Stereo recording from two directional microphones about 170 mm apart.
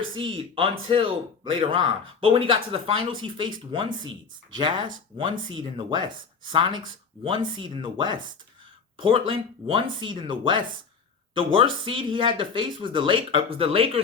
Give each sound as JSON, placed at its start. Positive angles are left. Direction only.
{"t": 0.1, "sound": "speech", "side_deg": -30}